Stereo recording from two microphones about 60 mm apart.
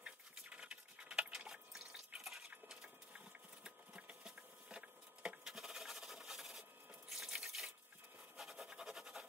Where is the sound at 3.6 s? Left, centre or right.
Centre.